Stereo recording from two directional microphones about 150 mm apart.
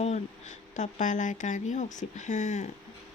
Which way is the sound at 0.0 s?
50° left (ahead or behind).